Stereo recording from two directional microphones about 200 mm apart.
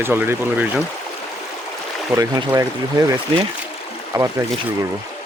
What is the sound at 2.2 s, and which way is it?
Speech, 15° right (ahead or behind).